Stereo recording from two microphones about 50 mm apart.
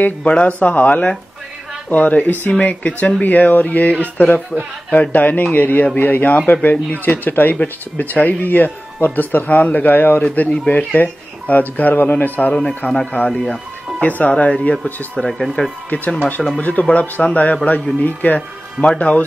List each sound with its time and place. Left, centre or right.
0.0 s speech: left
12.5 s speech: left
16.4 s speech: centre
16.9 s speech: left
18.8 s speech: left